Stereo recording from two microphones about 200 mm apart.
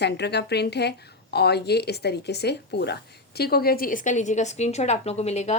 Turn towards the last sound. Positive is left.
turn(degrees=35)  # may be behind; listen again after turning